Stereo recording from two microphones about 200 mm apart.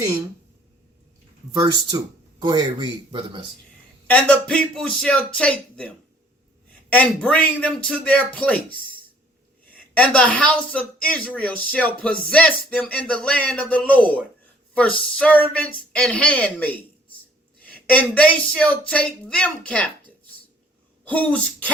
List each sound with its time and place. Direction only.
1.5 s speech: 20° right (ahead or behind)
4.0 s speech: 5° left (ahead or behind)
6.9 s speech: 5° left (ahead or behind)
9.9 s speech: 5° left (ahead or behind)
21.1 s speech: 5° left (ahead or behind)